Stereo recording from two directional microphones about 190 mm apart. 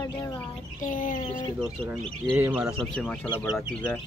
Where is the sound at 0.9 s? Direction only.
45° left (ahead or behind).